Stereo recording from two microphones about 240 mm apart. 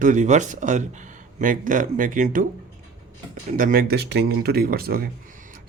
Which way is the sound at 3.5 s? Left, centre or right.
Right.